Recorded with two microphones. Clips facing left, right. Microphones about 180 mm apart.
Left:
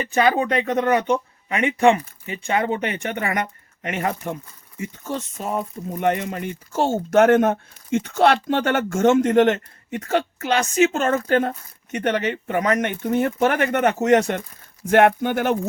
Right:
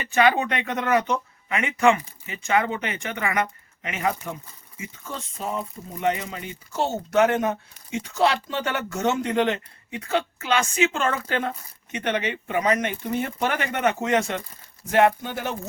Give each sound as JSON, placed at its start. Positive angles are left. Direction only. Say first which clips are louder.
{"t": 0.1, "sound": "speech", "louder": "left 1 dB", "side_deg": 35}
{"t": 14.8, "sound": "speech", "louder": "left 4 dB", "side_deg": 60}